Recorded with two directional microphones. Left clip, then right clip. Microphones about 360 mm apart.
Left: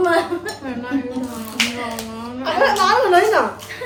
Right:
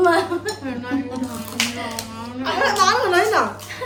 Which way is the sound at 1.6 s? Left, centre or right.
Centre.